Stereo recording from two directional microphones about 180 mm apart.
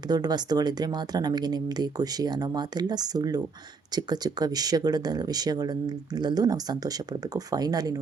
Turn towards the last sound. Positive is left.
turn(degrees=-20)  # may be behind; listen again after turning